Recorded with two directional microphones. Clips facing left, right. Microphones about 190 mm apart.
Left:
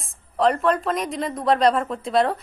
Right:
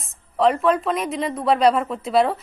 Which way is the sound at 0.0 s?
Centre (ahead or behind).